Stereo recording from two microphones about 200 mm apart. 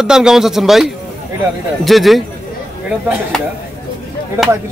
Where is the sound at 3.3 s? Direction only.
5° left (ahead or behind).